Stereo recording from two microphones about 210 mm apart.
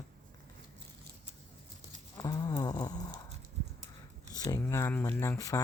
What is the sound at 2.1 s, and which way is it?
Livestock, 20° left (ahead or behind).